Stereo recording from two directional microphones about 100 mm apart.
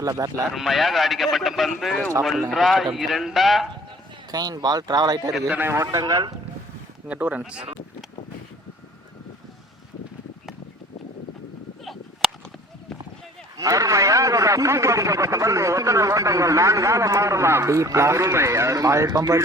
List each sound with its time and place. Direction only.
0.0 s a man's voice: 35° right (ahead or behind)
0.5 s speech: centre (ahead or behind)
4.3 s a man's voice: 40° right (ahead or behind)
5.5 s a man's voice: 20° right (ahead or behind); by 6.3 s 35° right (ahead or behind)
7.1 s speech: 15° right (ahead or behind)
13.6 s a man's voice: 35° right (ahead or behind)